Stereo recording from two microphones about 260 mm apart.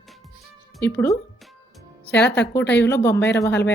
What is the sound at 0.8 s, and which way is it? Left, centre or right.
A woman's voice, centre.